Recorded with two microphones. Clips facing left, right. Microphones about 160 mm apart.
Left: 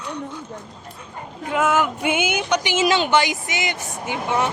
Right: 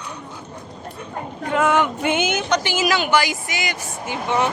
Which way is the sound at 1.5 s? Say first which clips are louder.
Right 1 dB; 5° left (ahead or behind).